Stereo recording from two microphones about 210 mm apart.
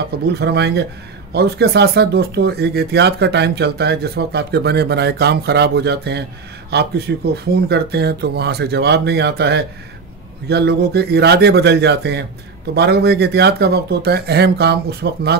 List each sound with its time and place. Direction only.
0.3 s speech: 50° right (ahead or behind)